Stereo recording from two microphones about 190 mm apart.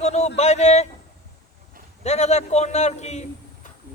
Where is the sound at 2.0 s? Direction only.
35° left (ahead or behind).